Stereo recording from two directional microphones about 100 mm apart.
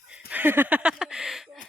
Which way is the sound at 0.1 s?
15° right (ahead or behind).